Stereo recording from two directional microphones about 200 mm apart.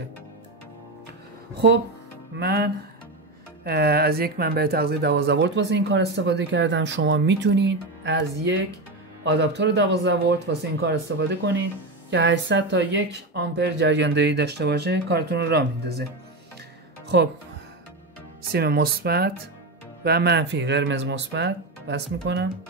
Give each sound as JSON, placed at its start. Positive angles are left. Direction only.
{"t": 2.3, "sound": "speech", "side_deg": -50}
{"t": 17.1, "sound": "speech", "side_deg": -60}
{"t": 18.4, "sound": "speech", "side_deg": -50}